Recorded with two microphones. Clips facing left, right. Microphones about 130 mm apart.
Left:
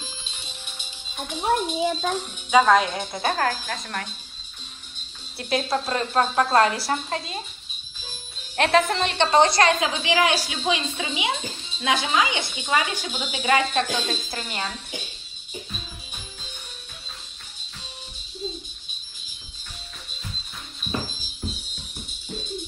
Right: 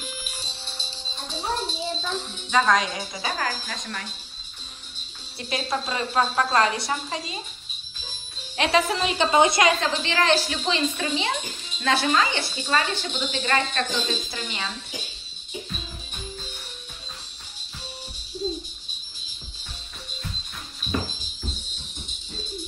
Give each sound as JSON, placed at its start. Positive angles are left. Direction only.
{"t": 0.0, "sound": "music", "side_deg": 25}
{"t": 1.9, "sound": "speech", "side_deg": 50}
{"t": 2.1, "sound": "a woman's voice", "side_deg": 10}
{"t": 5.4, "sound": "a woman's voice", "side_deg": 0}
{"t": 8.5, "sound": "a woman's voice", "side_deg": 0}
{"t": 9.8, "sound": "a woman's voice", "side_deg": 5}